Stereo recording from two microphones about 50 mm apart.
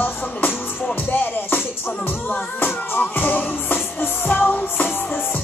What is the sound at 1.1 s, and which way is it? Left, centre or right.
Music, left.